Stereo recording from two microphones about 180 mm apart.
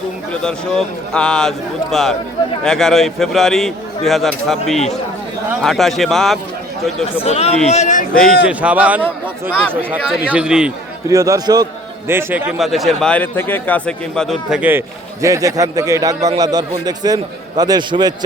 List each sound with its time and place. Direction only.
0.4 s speech: 5° left (ahead or behind)
7.3 s a man's voice: 35° left (ahead or behind)
8.2 s a man's voice: centre (ahead or behind)
10.3 s speech: 5° right (ahead or behind)
11.1 s a man's voice: 20° right (ahead or behind)